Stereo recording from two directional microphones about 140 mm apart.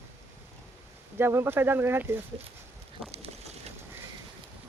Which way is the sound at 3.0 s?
45° right (ahead or behind).